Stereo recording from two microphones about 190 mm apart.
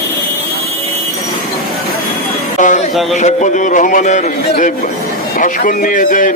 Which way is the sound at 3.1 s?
40° left (ahead or behind).